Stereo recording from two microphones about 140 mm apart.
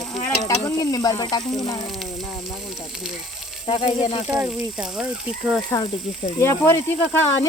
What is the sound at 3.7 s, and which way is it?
Speech, 40° left (ahead or behind).